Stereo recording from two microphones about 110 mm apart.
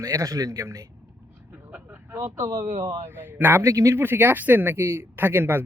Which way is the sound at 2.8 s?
25° right (ahead or behind).